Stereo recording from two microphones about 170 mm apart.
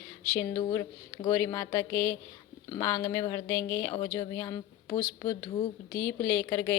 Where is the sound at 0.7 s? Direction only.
20° left (ahead or behind).